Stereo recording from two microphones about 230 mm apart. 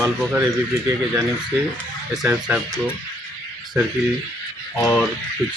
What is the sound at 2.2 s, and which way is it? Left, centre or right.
Speech, centre.